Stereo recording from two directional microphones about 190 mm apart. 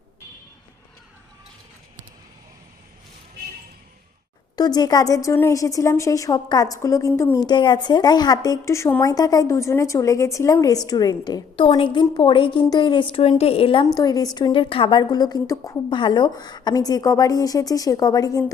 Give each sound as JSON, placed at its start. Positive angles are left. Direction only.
{"t": 4.5, "sound": "speech", "side_deg": 20}